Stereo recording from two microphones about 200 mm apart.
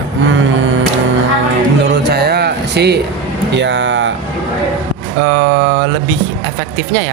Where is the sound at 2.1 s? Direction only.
55° right (ahead or behind).